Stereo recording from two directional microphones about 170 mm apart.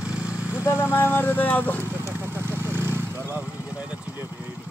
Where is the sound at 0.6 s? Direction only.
15° left (ahead or behind).